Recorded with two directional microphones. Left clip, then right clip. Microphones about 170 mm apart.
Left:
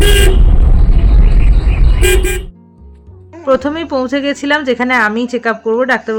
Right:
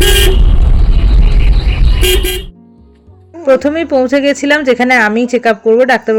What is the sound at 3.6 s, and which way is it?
Speech, 15° right (ahead or behind).